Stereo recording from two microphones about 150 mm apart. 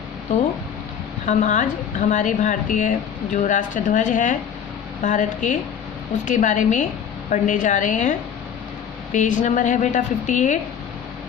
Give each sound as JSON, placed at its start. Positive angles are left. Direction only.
{"t": 1.2, "sound": "a woman's voice", "side_deg": 50}
{"t": 9.1, "sound": "a woman's voice", "side_deg": 60}